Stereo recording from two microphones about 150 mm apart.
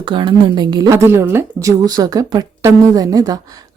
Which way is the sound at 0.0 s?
30° right (ahead or behind).